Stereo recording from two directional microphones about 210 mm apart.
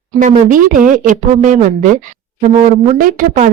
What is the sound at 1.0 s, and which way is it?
A woman's voice, 35° right (ahead or behind).